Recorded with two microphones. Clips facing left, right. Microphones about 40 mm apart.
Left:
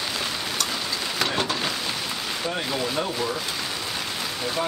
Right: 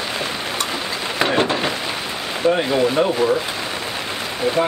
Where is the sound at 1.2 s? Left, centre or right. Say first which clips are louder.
Right 8 dB; right.